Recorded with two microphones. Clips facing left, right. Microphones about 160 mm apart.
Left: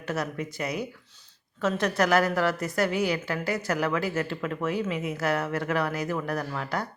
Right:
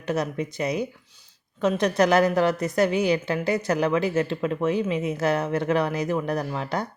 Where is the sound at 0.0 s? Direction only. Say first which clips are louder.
Right 4 dB; 20° right (ahead or behind).